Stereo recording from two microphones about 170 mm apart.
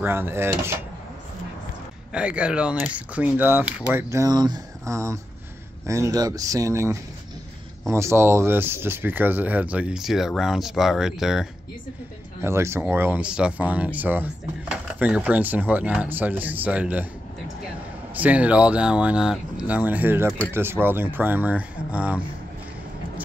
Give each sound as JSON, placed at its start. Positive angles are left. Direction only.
{"t": 0.0, "sound": "speech", "side_deg": -15}
{"t": 2.1, "sound": "speech", "side_deg": -5}
{"t": 12.4, "sound": "speech", "side_deg": -15}
{"t": 18.1, "sound": "speech", "side_deg": -10}